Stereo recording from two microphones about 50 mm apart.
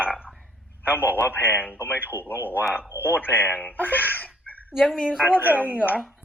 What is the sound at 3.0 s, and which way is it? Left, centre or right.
Speech, left.